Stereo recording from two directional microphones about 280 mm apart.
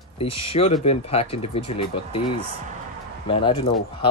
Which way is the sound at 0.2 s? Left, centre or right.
Centre.